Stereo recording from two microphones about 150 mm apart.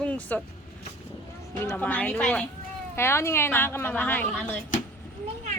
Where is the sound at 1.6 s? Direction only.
10° left (ahead or behind).